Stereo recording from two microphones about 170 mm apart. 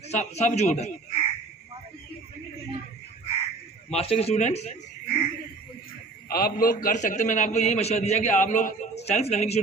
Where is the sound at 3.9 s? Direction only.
35° left (ahead or behind).